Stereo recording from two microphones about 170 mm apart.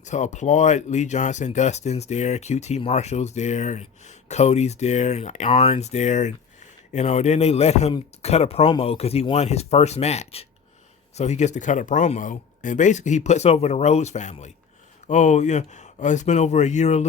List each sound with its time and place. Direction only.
0.0 s speech: 45° left (ahead or behind)